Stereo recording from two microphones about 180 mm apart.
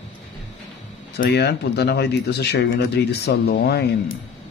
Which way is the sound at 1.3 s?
65° left (ahead or behind).